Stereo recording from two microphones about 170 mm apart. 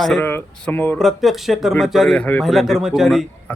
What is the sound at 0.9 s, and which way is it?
A man's voice, centre (ahead or behind).